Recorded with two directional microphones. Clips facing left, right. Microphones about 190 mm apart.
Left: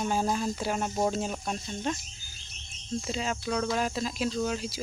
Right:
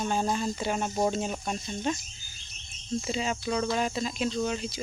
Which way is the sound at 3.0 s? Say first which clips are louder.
Right 1 dB; centre (ahead or behind).